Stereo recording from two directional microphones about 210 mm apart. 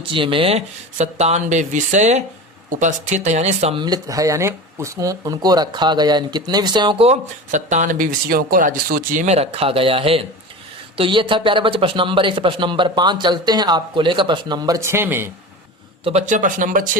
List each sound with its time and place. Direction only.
0.1 s speech: 25° right (ahead or behind)
16.0 s speech: 35° right (ahead or behind)